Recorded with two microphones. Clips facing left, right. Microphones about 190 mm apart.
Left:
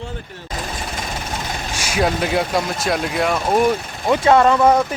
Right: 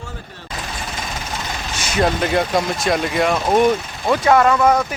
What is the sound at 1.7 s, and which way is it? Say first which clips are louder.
Speech: right 1 dB; 10° left (ahead or behind).